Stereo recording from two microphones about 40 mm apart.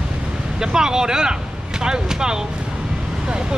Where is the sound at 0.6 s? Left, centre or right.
Centre.